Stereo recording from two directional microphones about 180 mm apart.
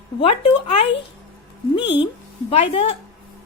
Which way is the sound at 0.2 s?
30° left (ahead or behind).